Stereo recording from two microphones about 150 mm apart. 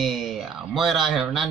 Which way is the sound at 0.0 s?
Centre (ahead or behind).